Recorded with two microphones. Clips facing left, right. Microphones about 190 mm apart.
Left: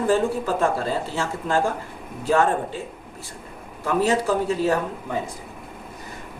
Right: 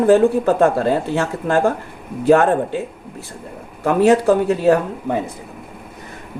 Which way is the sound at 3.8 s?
60° right (ahead or behind).